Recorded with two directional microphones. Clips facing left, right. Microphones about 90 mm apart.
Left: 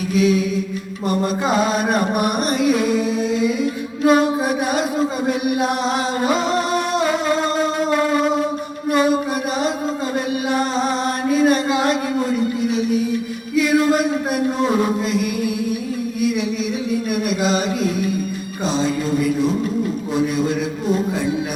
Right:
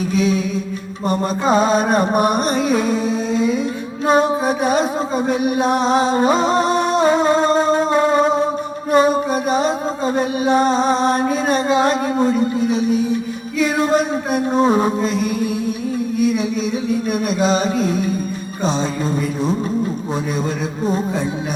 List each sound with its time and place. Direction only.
0.1 s music: 30° right (ahead or behind)
4.0 s music: 30° right (ahead or behind)
17.1 s music: 30° right (ahead or behind)